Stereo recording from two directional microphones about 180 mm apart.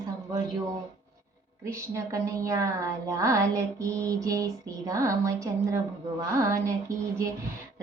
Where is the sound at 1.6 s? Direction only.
15° right (ahead or behind).